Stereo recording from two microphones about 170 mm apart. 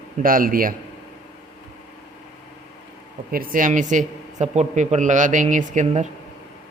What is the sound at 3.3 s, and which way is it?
A man's voice, 55° right (ahead or behind).